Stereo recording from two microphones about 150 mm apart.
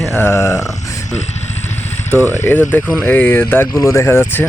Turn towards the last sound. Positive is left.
turn(degrees=15)  # may be behind; listen again after turning